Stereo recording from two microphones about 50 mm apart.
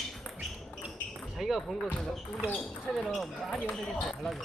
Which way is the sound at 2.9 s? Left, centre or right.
Centre.